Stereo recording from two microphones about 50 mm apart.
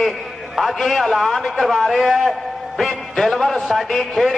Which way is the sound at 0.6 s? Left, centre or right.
Centre.